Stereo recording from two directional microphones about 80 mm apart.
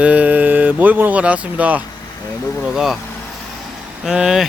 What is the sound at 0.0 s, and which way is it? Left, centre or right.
Speech, centre.